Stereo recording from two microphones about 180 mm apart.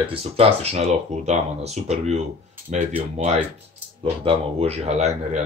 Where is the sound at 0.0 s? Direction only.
30° right (ahead or behind).